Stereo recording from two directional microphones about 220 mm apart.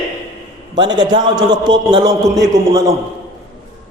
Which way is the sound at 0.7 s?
20° right (ahead or behind).